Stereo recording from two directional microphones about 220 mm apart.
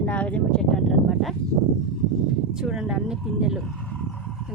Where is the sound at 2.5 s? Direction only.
Centre (ahead or behind).